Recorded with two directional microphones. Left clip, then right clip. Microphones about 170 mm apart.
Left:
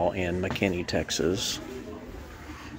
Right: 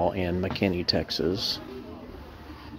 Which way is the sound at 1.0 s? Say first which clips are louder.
Even; 10° right (ahead or behind).